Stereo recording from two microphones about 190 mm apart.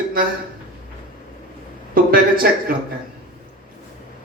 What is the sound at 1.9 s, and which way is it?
Speech, 50° right (ahead or behind).